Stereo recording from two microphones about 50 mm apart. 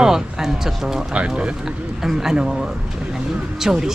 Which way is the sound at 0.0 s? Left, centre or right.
Centre.